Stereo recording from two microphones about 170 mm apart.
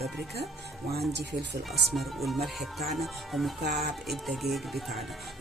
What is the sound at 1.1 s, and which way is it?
Speech, 85° right.